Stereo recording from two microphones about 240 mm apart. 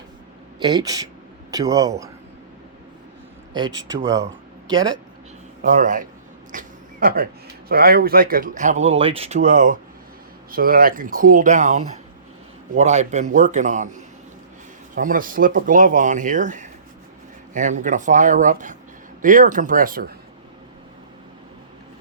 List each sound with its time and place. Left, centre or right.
0.6 s a man's voice: centre
3.8 s speech: centre
5.7 s speech: right
6.5 s a sound: right
7.7 s speech: right